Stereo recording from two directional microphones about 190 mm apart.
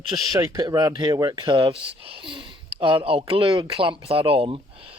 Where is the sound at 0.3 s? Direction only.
20° right (ahead or behind).